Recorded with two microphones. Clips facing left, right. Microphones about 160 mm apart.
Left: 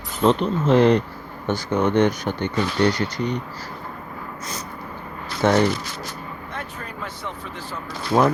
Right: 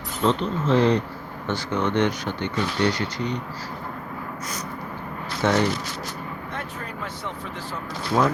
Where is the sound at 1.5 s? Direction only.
45° left (ahead or behind).